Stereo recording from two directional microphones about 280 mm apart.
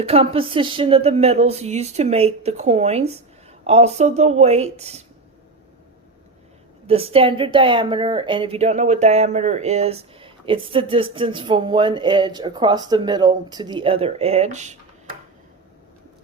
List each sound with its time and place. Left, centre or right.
0.0 s a woman's voice: centre
6.8 s a woman's voice: centre